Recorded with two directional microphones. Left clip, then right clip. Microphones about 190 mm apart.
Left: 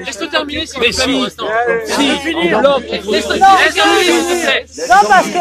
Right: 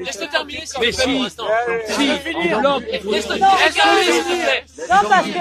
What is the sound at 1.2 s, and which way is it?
Speech, 50° right (ahead or behind).